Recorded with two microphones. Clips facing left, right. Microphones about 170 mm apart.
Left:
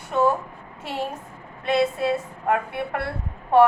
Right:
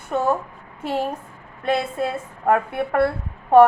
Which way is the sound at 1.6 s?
50° right (ahead or behind).